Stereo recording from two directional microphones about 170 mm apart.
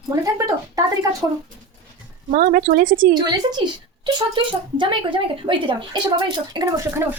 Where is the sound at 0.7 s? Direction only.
20° right (ahead or behind).